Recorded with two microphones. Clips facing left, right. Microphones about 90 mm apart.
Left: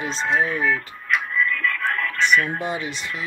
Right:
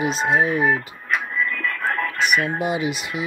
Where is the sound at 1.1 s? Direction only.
40° right (ahead or behind).